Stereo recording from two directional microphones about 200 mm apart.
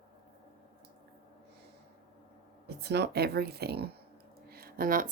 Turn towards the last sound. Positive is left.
turn(degrees=-45)  # may be behind; listen again after turning